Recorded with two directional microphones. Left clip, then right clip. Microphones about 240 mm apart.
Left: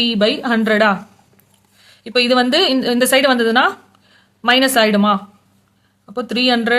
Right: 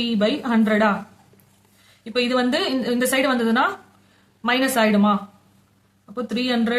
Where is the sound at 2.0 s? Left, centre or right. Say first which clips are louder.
Left 7 dB; left.